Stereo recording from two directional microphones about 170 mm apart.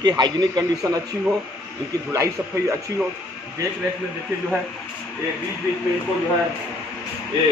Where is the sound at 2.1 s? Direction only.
20° right (ahead or behind).